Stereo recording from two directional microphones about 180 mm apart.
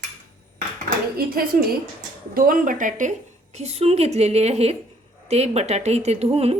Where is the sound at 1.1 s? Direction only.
55° right (ahead or behind).